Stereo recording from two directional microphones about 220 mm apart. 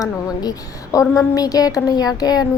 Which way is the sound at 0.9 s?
15° left (ahead or behind).